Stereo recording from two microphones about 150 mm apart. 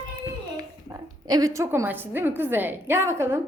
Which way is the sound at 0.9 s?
25° right (ahead or behind).